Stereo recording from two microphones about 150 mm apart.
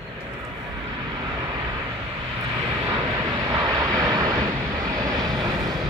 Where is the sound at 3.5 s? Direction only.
25° right (ahead or behind).